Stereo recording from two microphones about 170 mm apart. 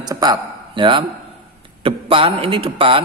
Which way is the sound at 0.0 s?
25° right (ahead or behind).